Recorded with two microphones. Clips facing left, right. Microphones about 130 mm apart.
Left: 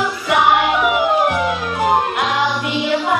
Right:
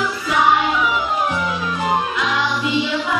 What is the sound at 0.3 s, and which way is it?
Music, 65° left (ahead or behind).